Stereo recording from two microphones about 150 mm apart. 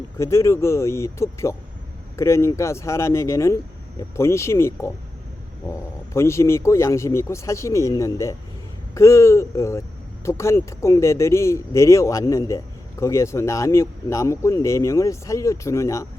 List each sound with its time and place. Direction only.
0.2 s speech: 20° left (ahead or behind)
6.1 s speech: 20° left (ahead or behind)